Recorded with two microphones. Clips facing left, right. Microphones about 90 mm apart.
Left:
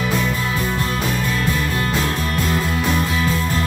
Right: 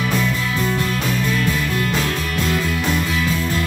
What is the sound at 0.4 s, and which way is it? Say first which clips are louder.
Music: right 1 dB; 30° left (ahead or behind).